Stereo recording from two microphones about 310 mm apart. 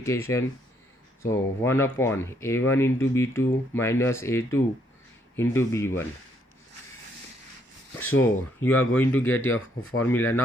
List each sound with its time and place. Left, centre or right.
0.0 s speech: centre
7.9 s speech: centre
9.4 s speech: left
10.0 s speech: centre